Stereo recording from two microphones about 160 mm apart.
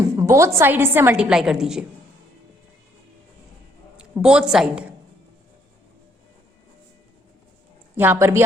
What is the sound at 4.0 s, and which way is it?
Speech, 5° right (ahead or behind).